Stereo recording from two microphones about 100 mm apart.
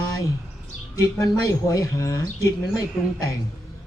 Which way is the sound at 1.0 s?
35° left (ahead or behind).